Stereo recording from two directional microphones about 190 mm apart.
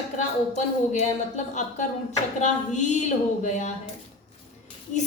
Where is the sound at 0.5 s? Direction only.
40° left (ahead or behind).